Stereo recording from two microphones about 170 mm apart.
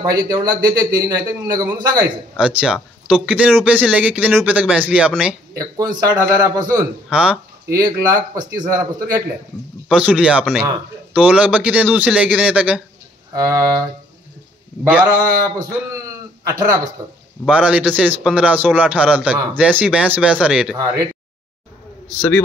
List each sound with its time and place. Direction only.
0.0 s a man's voice: 25° right (ahead or behind)
2.3 s speech: 5° right (ahead or behind)
5.5 s a man's voice: 20° right (ahead or behind)
7.1 s a sound: 5° right (ahead or behind)
7.7 s a man's voice: 20° right (ahead or behind)
9.8 s speech: 5° right (ahead or behind)
13.3 s a man's voice: 20° right (ahead or behind)
16.4 s a man's voice: 20° right (ahead or behind)
17.5 s speech: 5° right (ahead or behind)
20.7 s a man's voice: 20° right (ahead or behind)